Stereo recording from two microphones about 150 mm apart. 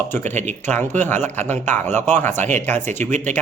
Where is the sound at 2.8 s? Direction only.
50° right (ahead or behind).